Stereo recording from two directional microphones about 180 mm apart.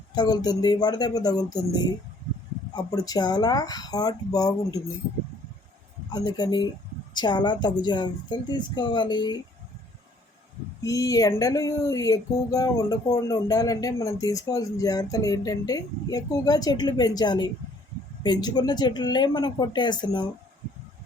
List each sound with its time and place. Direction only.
0.1 s speech: 20° left (ahead or behind)
6.1 s speech: 20° left (ahead or behind)
10.8 s speech: 20° left (ahead or behind)